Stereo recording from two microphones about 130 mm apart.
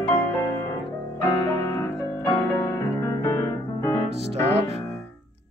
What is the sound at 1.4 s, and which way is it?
Music, 25° left (ahead or behind).